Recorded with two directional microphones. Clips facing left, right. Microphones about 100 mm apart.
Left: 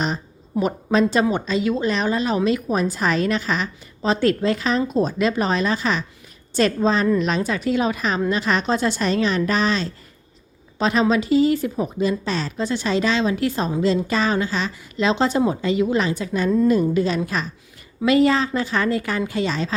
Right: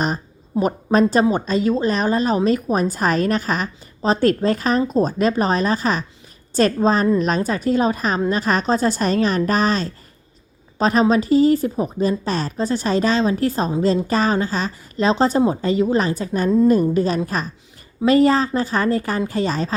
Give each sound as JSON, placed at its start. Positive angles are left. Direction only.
{"t": 0.6, "sound": "a woman's voice", "side_deg": -40}